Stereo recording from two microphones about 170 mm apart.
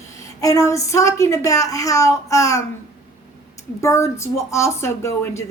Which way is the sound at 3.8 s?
15° left (ahead or behind).